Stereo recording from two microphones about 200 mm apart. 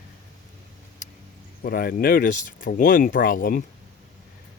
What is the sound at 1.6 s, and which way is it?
Speech, 50° left (ahead or behind).